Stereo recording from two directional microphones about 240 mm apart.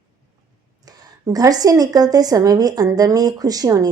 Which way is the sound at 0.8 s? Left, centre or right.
Centre.